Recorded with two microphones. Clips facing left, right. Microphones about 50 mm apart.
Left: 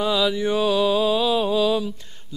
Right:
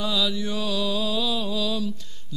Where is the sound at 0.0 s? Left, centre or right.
Left.